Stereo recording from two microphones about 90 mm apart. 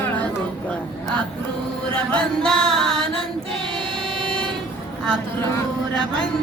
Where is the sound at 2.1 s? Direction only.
10° left (ahead or behind).